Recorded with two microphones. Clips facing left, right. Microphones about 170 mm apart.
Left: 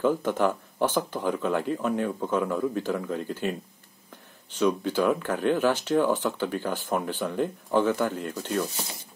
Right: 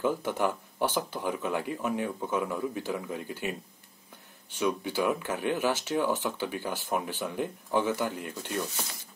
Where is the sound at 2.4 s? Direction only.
55° left (ahead or behind).